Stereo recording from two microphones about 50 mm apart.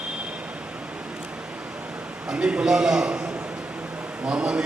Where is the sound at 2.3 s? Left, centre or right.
Centre.